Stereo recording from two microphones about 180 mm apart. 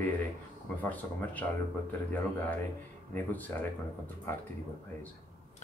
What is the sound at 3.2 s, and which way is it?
Speech, 10° left (ahead or behind).